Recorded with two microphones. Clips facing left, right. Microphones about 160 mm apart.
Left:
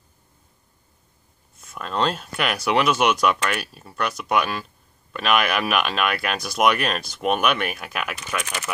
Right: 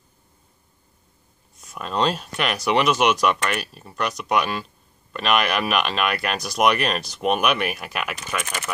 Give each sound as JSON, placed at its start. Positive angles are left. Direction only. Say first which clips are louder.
{"t": 1.6, "sound": "speech", "louder": "right 1 dB", "side_deg": 0}